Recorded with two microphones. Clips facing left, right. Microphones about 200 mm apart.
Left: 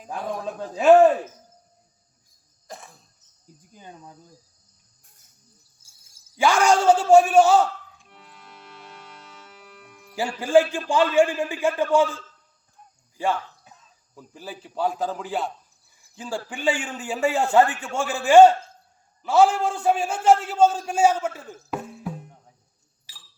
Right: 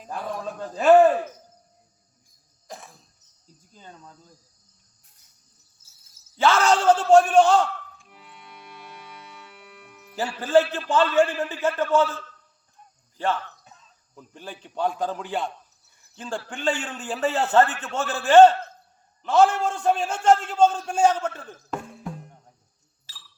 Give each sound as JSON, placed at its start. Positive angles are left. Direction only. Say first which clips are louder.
{"t": 0.6, "sound": "a man's voice", "louder": "left 2 dB", "side_deg": 0}
{"t": 2.6, "sound": "cough", "louder": "even", "side_deg": 0}
{"t": 3.4, "sound": "cricket", "louder": "left 2 dB", "side_deg": 15}
{"t": 5.8, "sound": "a man's voice", "louder": "left 2 dB", "side_deg": 10}
{"t": 8.0, "sound": "music", "louder": "right 1 dB", "side_deg": 0}
{"t": 9.4, "sound": "music", "louder": "even", "side_deg": 0}
{"t": 10.2, "sound": "a man's voice", "louder": "left 1 dB", "side_deg": 10}
{"t": 13.1, "sound": "a man's voice", "louder": "left 1 dB", "side_deg": 10}
{"t": 16.0, "sound": "a sound", "louder": "left 1 dB", "side_deg": 10}
{"t": 16.5, "sound": "a man's voice", "louder": "left 2 dB", "side_deg": 10}
{"t": 23.1, "sound": "a sound", "louder": "right 1 dB", "side_deg": 15}